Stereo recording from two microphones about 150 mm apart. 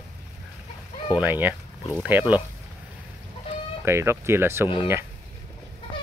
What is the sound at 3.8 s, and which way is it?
Speech, 15° right (ahead or behind).